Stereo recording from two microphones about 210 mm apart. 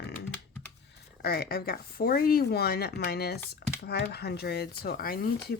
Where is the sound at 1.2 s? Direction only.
50° left (ahead or behind).